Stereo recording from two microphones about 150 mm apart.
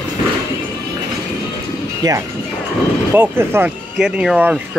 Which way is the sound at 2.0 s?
25° right (ahead or behind).